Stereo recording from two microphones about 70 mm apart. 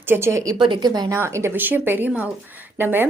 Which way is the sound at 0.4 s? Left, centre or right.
Right.